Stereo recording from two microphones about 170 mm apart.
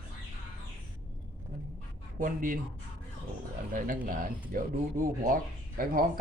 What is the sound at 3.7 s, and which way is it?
Speech, 55° right (ahead or behind).